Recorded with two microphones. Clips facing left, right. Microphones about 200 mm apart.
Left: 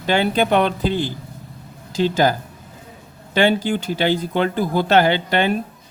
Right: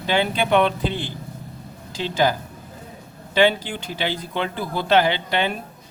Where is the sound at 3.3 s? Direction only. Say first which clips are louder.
Left 2 dB; 45° left (ahead or behind).